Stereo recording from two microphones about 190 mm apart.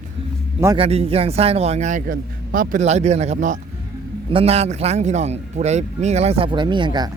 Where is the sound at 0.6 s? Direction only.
25° right (ahead or behind).